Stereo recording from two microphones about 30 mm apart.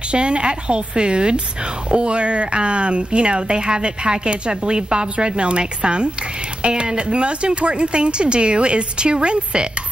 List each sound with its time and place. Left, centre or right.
0.1 s speech: right